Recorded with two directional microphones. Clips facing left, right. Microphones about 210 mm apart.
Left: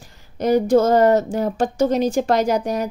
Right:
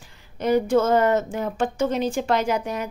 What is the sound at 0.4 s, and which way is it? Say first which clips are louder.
Speech: left 4 dB; 40° left (ahead or behind).